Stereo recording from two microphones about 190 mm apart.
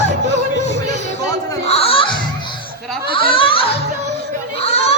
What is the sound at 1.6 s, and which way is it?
Music, 30° left (ahead or behind).